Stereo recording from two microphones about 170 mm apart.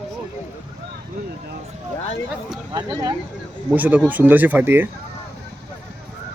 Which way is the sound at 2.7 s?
25° right (ahead or behind).